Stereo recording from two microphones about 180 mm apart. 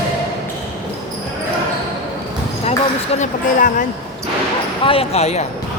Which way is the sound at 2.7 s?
40° left (ahead or behind).